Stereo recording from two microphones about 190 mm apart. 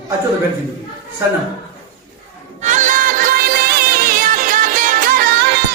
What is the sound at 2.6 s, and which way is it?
Music, 40° right (ahead or behind).